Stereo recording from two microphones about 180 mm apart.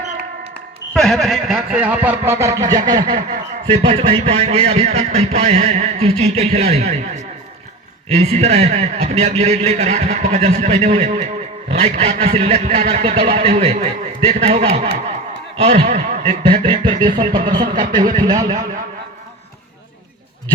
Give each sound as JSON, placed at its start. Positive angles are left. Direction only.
{"t": 0.9, "sound": "speech", "side_deg": 0}
{"t": 3.7, "sound": "speech", "side_deg": -30}
{"t": 8.1, "sound": "speech", "side_deg": -35}
{"t": 16.5, "sound": "a sound", "side_deg": -25}